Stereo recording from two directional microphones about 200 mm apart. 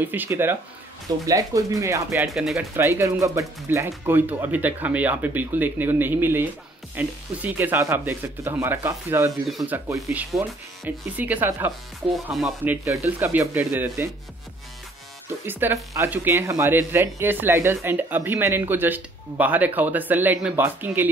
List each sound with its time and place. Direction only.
0.0 s speech: 10° right (ahead or behind)
2.2 s speech: centre (ahead or behind)
2.7 s speech: 15° right (ahead or behind)
10.3 s speech: 5° right (ahead or behind)
15.4 s speech: 15° right (ahead or behind)